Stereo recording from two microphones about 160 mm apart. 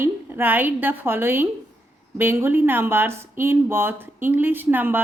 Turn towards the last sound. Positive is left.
turn(degrees=-10)  # may be behind; listen again after turning